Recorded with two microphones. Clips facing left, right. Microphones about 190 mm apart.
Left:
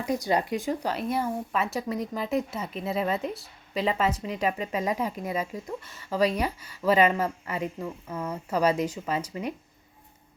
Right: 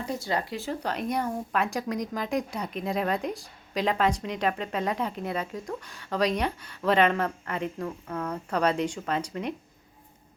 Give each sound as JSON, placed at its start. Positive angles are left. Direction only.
{"t": 0.0, "sound": "speech", "side_deg": 15}